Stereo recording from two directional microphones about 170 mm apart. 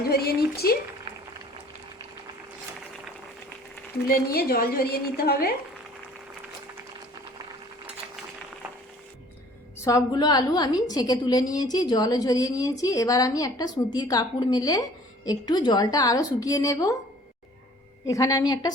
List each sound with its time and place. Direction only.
0.1 s a sound: 65° left (ahead or behind)
4.0 s a woman's voice: 60° left (ahead or behind)
9.7 s a woman's voice: 15° left (ahead or behind)
18.0 s a woman's voice: 20° left (ahead or behind)